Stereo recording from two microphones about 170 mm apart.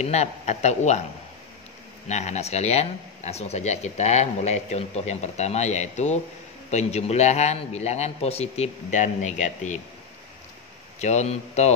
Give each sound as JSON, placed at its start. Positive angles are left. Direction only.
{"t": 0.0, "sound": "speech", "side_deg": 40}
{"t": 2.0, "sound": "speech", "side_deg": 40}
{"t": 11.0, "sound": "speech", "side_deg": 45}